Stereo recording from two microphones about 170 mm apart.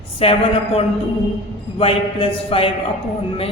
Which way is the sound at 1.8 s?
30° left (ahead or behind).